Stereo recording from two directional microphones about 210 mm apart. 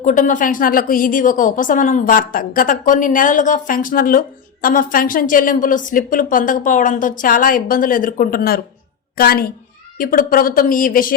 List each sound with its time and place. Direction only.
0.0 s a woman's voice: 40° left (ahead or behind)